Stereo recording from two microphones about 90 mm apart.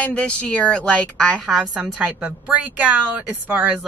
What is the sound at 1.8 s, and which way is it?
A woman's voice, 15° right (ahead or behind).